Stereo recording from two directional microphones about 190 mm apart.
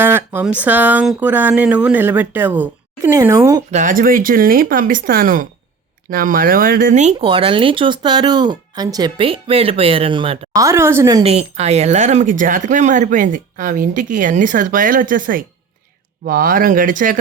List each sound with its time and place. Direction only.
0.0 s speech: 10° right (ahead or behind)
3.7 s speech: 40° right (ahead or behind)
10.5 s speech: 15° right (ahead or behind)
11.2 s speech: 30° right (ahead or behind)